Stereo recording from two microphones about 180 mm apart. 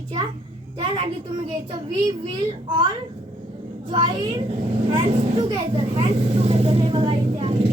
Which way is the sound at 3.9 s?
25° right (ahead or behind).